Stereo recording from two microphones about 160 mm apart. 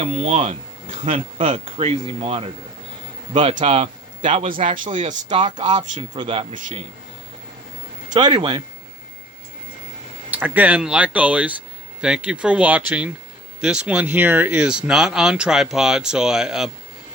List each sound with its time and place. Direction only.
0.0 s speech: 45° right (ahead or behind)
3.6 s speech: 45° right (ahead or behind)
5.4 s speech: 30° right (ahead or behind)
8.1 s speech: 30° right (ahead or behind)
10.3 s speech: 10° right (ahead or behind)